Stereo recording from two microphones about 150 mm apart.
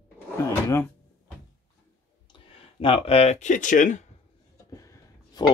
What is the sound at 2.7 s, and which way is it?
Speech, 40° left (ahead or behind).